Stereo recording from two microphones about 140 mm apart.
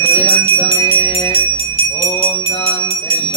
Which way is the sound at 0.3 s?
40° left (ahead or behind).